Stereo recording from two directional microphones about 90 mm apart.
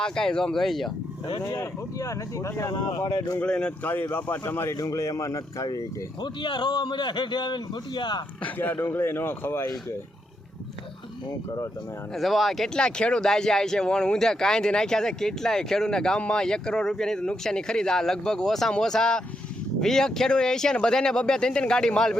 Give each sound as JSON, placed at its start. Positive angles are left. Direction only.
{"t": 0.0, "sound": "speech", "side_deg": 10}
{"t": 1.5, "sound": "speech", "side_deg": 35}
{"t": 3.4, "sound": "speech", "side_deg": 10}
{"t": 4.1, "sound": "speech", "side_deg": 25}
{"t": 6.2, "sound": "a man's voice", "side_deg": 60}
{"t": 8.4, "sound": "speech", "side_deg": 20}
{"t": 12.1, "sound": "speech", "side_deg": 0}